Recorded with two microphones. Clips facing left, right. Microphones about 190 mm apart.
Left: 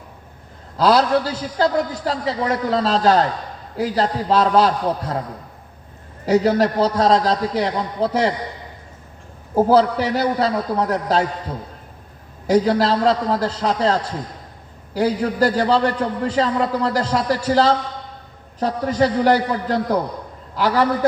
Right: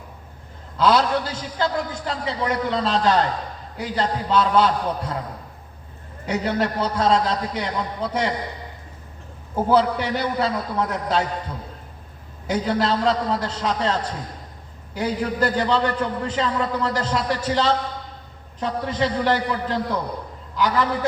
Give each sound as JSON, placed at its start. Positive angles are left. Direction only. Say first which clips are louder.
{"t": 0.8, "sound": "a man's voice", "louder": "left 3 dB", "side_deg": 35}
{"t": 6.2, "sound": "a man's voice", "louder": "left 7 dB", "side_deg": 35}
{"t": 9.6, "sound": "a man's voice", "louder": "left 4 dB", "side_deg": 35}
{"t": 12.5, "sound": "a man's voice", "louder": "left 5 dB", "side_deg": 35}